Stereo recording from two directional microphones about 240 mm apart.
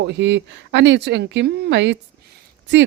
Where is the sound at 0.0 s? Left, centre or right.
Right.